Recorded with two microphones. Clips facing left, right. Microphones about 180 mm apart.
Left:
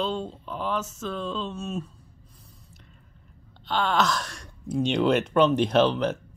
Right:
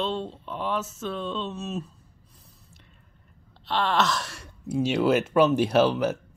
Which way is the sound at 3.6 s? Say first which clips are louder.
Even; centre (ahead or behind).